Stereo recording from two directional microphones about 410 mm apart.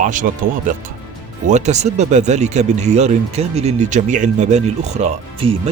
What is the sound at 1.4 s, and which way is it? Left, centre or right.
Speech, centre.